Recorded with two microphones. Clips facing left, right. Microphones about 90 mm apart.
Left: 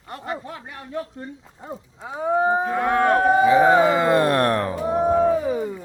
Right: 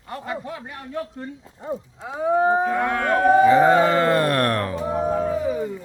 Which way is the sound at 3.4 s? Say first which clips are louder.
Left 1 dB; 5° left (ahead or behind).